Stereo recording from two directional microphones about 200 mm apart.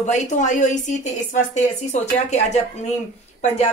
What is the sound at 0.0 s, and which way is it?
Speech, 35° left (ahead or behind).